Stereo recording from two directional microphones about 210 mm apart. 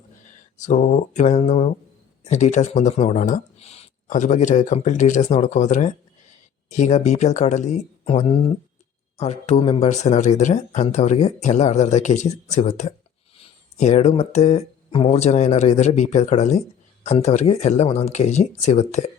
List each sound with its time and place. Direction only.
0.3 s speech: 35° left (ahead or behind)